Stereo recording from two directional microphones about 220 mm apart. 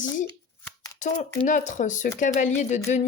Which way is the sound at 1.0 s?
35° left (ahead or behind).